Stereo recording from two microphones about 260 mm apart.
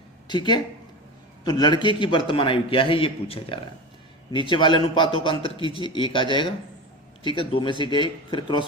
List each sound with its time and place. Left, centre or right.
0.3 s a man's voice: centre